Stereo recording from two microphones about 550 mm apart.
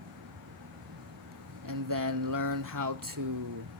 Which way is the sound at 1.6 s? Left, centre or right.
Right.